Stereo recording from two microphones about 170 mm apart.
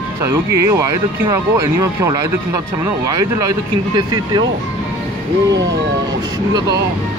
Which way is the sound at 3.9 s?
25° right (ahead or behind).